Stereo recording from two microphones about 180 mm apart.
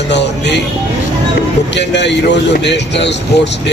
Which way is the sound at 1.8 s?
75° left (ahead or behind).